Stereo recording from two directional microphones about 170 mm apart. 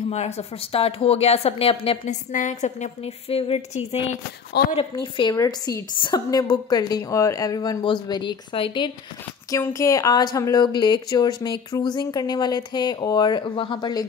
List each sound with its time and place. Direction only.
0.1 s speech: 40° left (ahead or behind)
2.3 s speech: 45° left (ahead or behind); by 8.9 s 30° left (ahead or behind)
9.5 s speech: 20° left (ahead or behind)